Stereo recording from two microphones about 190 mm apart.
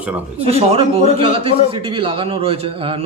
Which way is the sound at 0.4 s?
30° right (ahead or behind).